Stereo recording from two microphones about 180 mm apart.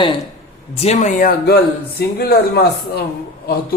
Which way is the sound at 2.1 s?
60° left (ahead or behind).